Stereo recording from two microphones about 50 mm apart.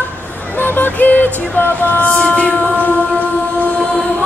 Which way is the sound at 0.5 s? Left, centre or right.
Left.